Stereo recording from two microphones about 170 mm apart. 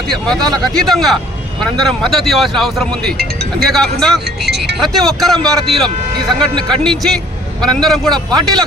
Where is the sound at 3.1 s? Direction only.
70° right (ahead or behind).